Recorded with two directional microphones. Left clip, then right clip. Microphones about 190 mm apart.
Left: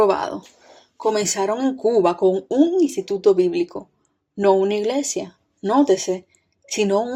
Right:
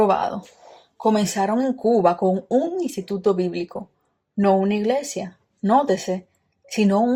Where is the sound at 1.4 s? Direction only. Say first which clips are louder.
Even; 30° left (ahead or behind).